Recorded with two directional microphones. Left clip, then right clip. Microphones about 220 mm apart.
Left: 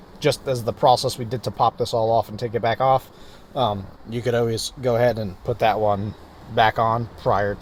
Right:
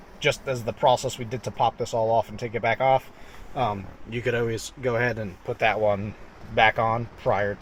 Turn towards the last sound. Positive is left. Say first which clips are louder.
# left 3 dB
turn(degrees=20)  # may be behind; listen again after turning